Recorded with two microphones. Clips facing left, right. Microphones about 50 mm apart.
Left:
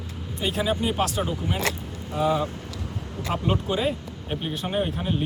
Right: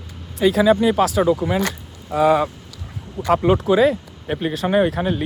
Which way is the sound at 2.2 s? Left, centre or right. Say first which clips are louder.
Right 8 dB; right.